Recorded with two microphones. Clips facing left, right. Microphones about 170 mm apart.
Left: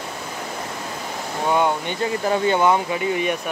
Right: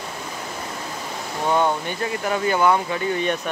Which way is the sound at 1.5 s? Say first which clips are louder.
Even; 15° left (ahead or behind).